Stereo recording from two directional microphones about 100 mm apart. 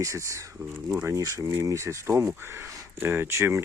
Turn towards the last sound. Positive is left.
turn(degrees=-25)  # may be behind; listen again after turning